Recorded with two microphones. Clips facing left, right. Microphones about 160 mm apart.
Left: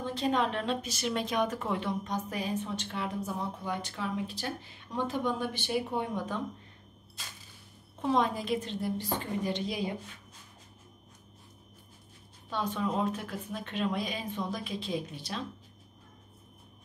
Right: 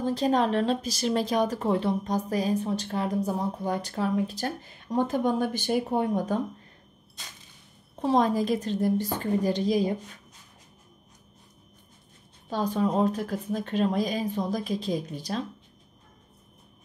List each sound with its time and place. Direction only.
0.0 s a woman's voice: 40° right (ahead or behind)
7.9 s a woman's voice: 35° right (ahead or behind)
12.4 s a woman's voice: 40° right (ahead or behind)